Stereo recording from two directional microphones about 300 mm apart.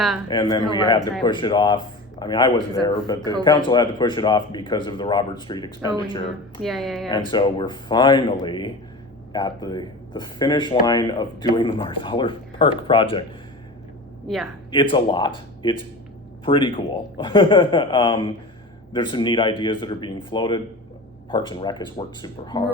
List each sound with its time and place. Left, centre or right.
0.3 s speech: centre
3.2 s a man's voice: centre
3.7 s speech: centre
6.6 s speech: centre
7.1 s speech: centre
14.3 s speech: centre
14.7 s speech: centre